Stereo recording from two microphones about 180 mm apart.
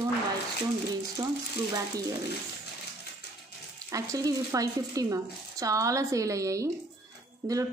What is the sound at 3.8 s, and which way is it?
Speech, 15° right (ahead or behind).